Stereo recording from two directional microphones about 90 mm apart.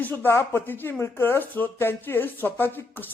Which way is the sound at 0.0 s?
20° left (ahead or behind).